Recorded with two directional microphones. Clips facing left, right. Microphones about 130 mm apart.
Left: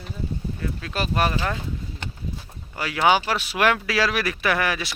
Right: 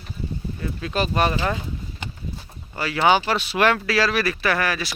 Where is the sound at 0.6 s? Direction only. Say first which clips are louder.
Right 5 dB; 5° right (ahead or behind).